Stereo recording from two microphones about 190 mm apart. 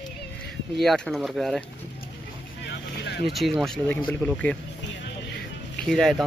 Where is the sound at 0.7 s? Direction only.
Centre (ahead or behind).